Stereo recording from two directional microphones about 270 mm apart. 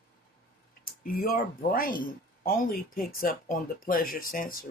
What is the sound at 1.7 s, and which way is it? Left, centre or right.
Speech, left.